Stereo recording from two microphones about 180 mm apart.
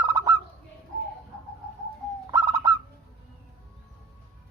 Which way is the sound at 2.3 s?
20° right (ahead or behind).